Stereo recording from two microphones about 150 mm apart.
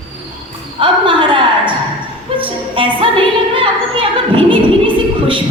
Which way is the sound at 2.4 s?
35° right (ahead or behind).